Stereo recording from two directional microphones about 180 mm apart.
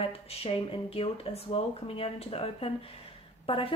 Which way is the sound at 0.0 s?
30° left (ahead or behind).